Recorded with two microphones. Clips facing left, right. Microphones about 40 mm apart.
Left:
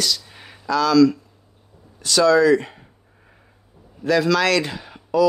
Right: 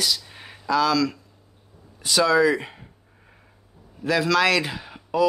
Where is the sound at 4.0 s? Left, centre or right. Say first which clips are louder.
Left 2 dB; centre.